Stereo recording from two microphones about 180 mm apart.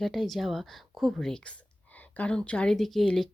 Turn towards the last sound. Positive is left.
turn(degrees=0)  # may be behind; listen again after turning